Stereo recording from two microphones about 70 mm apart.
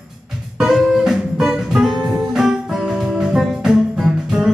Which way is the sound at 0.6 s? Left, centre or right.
Centre.